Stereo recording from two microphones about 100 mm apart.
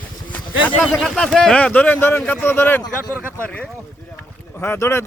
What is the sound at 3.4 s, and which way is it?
Speech, 15° left (ahead or behind).